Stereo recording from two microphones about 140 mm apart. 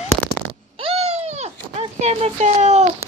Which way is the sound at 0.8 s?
45° right (ahead or behind).